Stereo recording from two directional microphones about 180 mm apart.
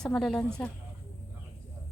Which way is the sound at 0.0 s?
Centre (ahead or behind).